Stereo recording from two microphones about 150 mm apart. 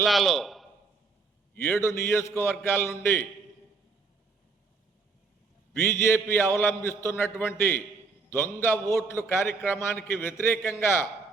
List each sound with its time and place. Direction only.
0.0 s a man's voice: centre (ahead or behind)
1.5 s a man's voice: 15° left (ahead or behind)
5.7 s a man's voice: 15° left (ahead or behind)